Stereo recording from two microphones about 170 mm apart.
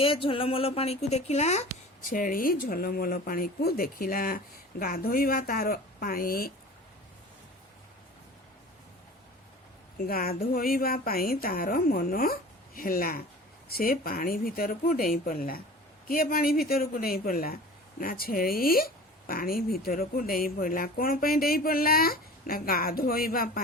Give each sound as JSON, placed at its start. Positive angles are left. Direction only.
{"t": 0.0, "sound": "a woman's voice", "side_deg": 30}
{"t": 2.0, "sound": "speech", "side_deg": 55}
{"t": 10.1, "sound": "speech", "side_deg": 60}